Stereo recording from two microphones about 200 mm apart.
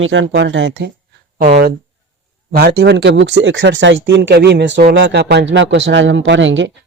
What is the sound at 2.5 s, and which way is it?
A man's voice, 55° right (ahead or behind).